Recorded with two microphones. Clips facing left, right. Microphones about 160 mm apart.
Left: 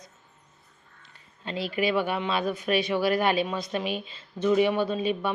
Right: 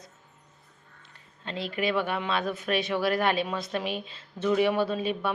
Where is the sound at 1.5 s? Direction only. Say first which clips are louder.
Left 2 dB; 5° left (ahead or behind).